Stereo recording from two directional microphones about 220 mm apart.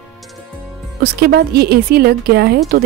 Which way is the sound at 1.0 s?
45° right (ahead or behind).